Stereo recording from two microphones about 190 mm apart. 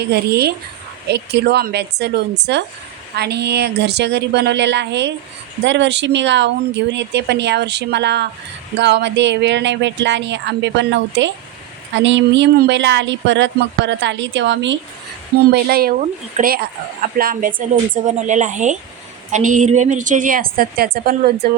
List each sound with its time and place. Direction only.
0.0 s speech: 60° right (ahead or behind)
15.4 s a woman's voice: 55° right (ahead or behind)
17.9 s a woman's voice: 40° right (ahead or behind)